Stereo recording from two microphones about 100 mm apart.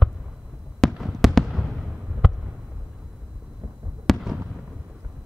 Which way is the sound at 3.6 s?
30° right (ahead or behind).